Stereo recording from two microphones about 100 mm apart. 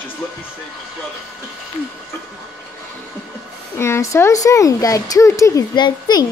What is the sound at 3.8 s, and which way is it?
Speech, 30° left (ahead or behind).